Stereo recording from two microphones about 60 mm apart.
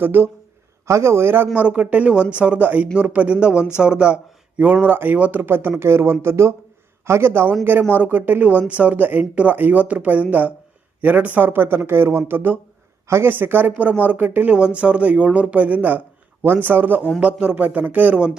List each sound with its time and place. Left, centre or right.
0.0 s speech: right
0.9 s speech: right
1.5 s speech: right
17.2 s speech: centre